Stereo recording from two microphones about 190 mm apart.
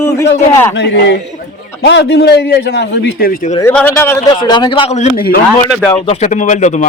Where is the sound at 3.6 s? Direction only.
10° left (ahead or behind); by 5.0 s 30° left (ahead or behind).